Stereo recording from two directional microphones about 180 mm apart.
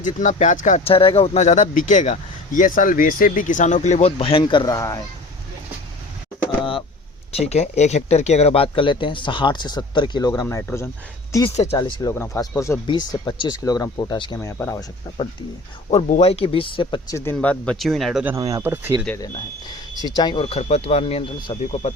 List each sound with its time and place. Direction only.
0.0 s speech: 45° left (ahead or behind)
0.9 s speech: 30° left (ahead or behind)
7.3 s speech: 35° left (ahead or behind); by 10.8 s 15° left (ahead or behind)
11.4 s speech: 35° left (ahead or behind)
11.7 s speech: 20° left (ahead or behind)
15.9 s speech: 40° left (ahead or behind); by 17.3 s 20° left (ahead or behind)
17.3 s speech: 5° left (ahead or behind)
18.3 s speech: 20° right (ahead or behind)
20.1 s speech: 25° left (ahead or behind)